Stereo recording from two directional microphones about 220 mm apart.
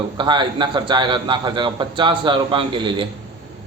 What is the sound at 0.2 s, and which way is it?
A man's voice, 20° right (ahead or behind).